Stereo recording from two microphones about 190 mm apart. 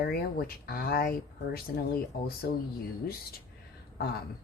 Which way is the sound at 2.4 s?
55° left (ahead or behind).